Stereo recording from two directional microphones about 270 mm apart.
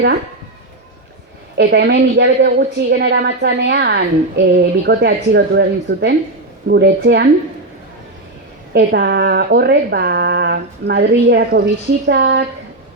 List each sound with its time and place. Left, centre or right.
1.5 s speech: right
8.7 s speech: right